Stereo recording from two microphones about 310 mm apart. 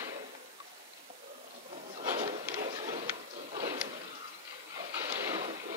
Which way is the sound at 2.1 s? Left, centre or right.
Right.